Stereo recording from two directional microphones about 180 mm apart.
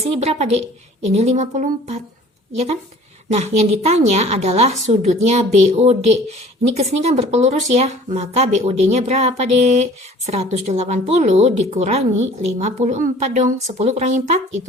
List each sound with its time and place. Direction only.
0.0 s speech: 35° right (ahead or behind)
3.3 s speech: 35° right (ahead or behind)